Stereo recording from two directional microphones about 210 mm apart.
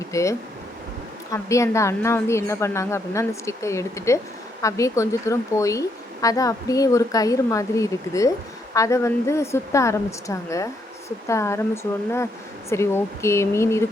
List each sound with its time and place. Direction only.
0.1 s a woman's voice: 15° left (ahead or behind)